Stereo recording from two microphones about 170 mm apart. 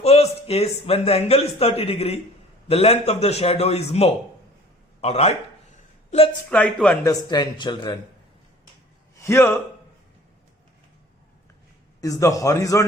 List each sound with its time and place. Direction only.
0.0 s a man's voice: 35° left (ahead or behind)
6.5 s speech: 5° left (ahead or behind)
7.0 s speech: 20° left (ahead or behind)
9.2 s speech: 15° left (ahead or behind)
11.9 s speech: 20° left (ahead or behind)